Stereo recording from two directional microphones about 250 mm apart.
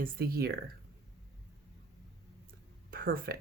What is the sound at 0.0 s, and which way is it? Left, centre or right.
Speech, right.